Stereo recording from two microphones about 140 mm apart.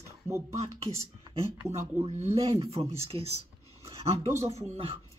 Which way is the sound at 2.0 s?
50° right (ahead or behind).